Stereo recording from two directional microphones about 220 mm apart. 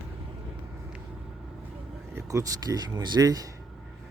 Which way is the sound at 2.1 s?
15° right (ahead or behind).